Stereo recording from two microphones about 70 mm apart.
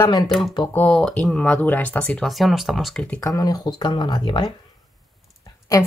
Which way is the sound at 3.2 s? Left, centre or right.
Left.